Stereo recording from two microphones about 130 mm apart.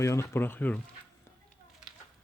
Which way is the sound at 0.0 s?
20° left (ahead or behind).